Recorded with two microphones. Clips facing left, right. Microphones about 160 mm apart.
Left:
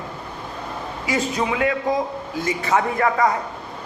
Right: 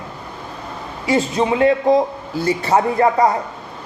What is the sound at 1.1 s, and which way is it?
A man's voice, 30° right (ahead or behind).